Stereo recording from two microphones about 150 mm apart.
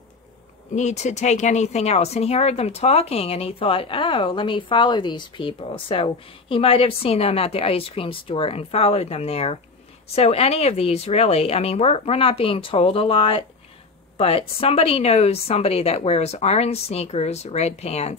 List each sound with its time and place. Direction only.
0.7 s a woman's voice: 50° left (ahead or behind)